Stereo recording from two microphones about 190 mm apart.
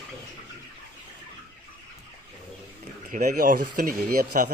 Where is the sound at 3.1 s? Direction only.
45° right (ahead or behind).